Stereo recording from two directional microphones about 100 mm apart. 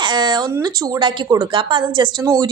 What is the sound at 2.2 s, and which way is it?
Speech, 35° right (ahead or behind).